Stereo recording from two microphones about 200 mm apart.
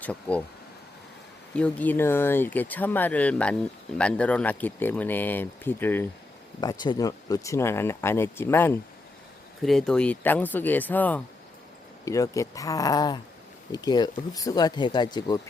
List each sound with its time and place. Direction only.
0.0 s speech: 5° left (ahead or behind)
1.5 s speech: 5° left (ahead or behind); by 15.4 s 20° left (ahead or behind)